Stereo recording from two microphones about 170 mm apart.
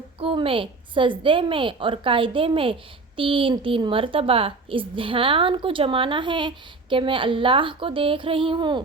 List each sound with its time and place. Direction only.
0.2 s a woman's voice: 30° right (ahead or behind)